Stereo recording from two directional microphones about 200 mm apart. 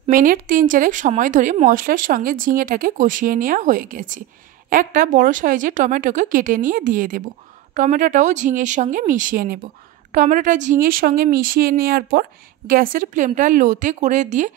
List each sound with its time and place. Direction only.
0.0 s a woman's voice: 45° right (ahead or behind)